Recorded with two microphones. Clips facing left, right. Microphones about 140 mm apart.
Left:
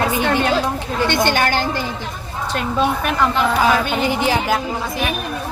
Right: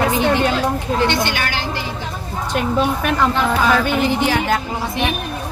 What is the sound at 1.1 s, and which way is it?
Speech, 50° left (ahead or behind).